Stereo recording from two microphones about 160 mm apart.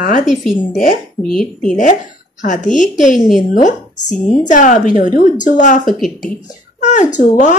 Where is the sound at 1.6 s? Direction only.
55° left (ahead or behind).